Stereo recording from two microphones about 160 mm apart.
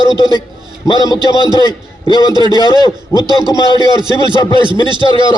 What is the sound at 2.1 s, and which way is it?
Speech, 25° right (ahead or behind).